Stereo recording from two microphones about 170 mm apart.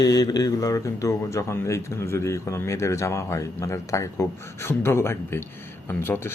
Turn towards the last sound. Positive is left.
turn(degrees=15)  # may be behind; listen again after turning